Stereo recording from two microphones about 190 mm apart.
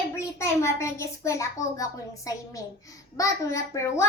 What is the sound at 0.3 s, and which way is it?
A woman's voice, 15° left (ahead or behind).